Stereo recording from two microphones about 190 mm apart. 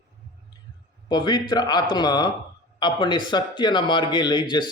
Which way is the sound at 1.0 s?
20° left (ahead or behind).